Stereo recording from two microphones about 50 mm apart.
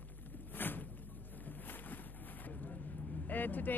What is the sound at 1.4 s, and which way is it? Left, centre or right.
Vehicle, left.